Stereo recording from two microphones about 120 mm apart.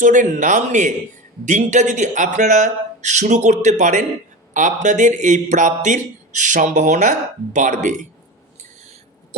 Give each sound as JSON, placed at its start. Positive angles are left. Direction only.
{"t": 0.0, "sound": "a man's voice", "side_deg": -90}